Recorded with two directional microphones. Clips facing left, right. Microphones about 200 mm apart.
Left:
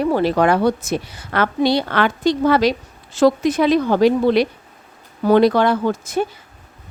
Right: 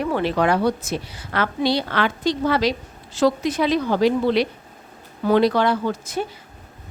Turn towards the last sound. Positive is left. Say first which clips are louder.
# left 4 dB
turn(degrees=50)  # may be behind; listen again after turning